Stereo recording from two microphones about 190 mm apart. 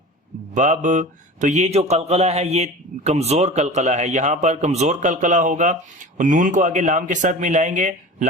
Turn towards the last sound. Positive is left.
turn(degrees=-40)  # may be behind; listen again after turning